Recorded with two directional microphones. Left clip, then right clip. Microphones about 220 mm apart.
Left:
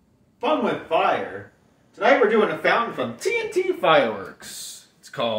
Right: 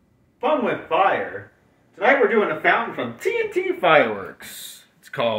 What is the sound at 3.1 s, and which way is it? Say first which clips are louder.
Speech: right 2 dB; 10° right (ahead or behind).